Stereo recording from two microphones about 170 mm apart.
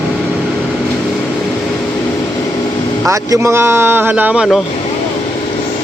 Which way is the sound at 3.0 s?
20° right (ahead or behind).